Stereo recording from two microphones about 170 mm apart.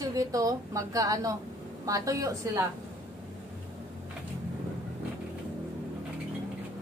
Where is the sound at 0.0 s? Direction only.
20° right (ahead or behind).